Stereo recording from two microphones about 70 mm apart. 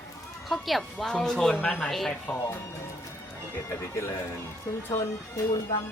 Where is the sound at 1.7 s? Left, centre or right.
Centre.